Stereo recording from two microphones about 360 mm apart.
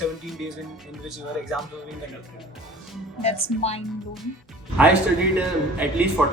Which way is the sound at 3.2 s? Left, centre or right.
Centre.